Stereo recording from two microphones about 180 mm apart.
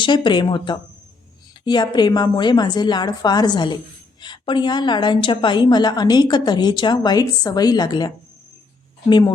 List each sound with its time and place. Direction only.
0.0 s a woman's voice: 25° left (ahead or behind)